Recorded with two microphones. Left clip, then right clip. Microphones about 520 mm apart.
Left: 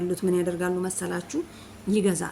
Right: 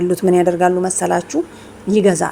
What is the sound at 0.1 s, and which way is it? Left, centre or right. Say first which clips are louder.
A woman's voice: right 13 dB; left.